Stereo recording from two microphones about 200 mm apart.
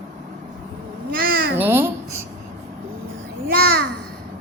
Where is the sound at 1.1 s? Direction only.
45° right (ahead or behind).